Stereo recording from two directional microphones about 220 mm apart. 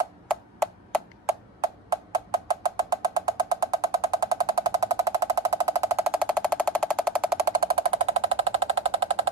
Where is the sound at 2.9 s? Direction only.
20° right (ahead or behind).